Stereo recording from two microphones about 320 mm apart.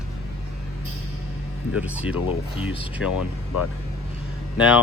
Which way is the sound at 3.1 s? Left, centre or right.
Left.